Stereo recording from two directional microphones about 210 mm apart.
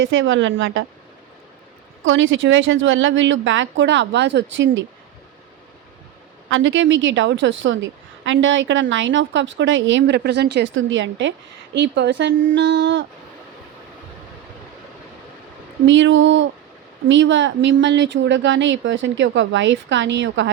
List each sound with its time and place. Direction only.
0.0 s a woman's voice: 65° right (ahead or behind)
2.0 s a woman's voice: 65° right (ahead or behind)
6.5 s a woman's voice: 65° right (ahead or behind)
15.9 s a woman's voice: 65° right (ahead or behind)